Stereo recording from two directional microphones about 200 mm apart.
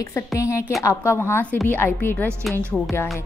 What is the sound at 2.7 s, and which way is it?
Music, 5° left (ahead or behind).